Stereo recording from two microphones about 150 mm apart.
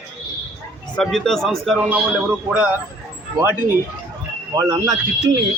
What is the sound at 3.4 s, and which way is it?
Speech, 15° right (ahead or behind).